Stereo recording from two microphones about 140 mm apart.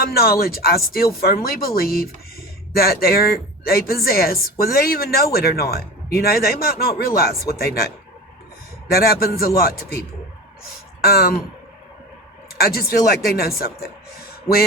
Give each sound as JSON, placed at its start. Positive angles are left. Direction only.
{"t": 0.0, "sound": "a woman's voice", "side_deg": 90}
{"t": 10.6, "sound": "a sound", "side_deg": 90}
{"t": 12.5, "sound": "speech", "side_deg": 90}